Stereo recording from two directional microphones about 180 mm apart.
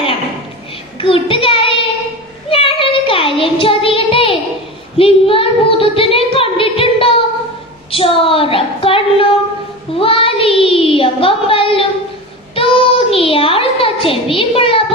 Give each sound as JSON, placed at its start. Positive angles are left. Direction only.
{"t": 1.0, "sound": "child singing", "side_deg": 30}
{"t": 4.9, "sound": "a woman's voice", "side_deg": 30}
{"t": 9.9, "sound": "child singing", "side_deg": 30}